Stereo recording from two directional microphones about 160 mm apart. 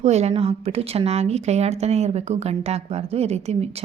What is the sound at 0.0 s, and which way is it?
A woman's voice, 40° right (ahead or behind).